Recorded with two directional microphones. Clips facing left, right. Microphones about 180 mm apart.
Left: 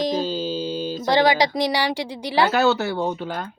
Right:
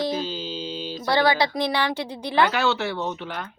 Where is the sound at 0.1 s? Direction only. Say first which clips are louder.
Left 5 dB; 40° left (ahead or behind).